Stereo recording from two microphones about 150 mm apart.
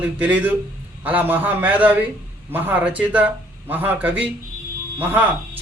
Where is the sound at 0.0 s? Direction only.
10° right (ahead or behind).